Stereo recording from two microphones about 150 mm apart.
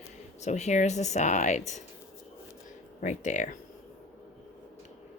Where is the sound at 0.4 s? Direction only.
50° left (ahead or behind).